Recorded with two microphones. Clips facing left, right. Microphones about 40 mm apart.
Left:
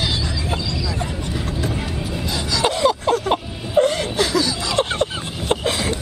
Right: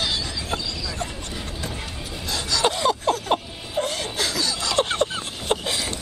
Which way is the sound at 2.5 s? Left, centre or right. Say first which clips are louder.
Left 3 dB; centre.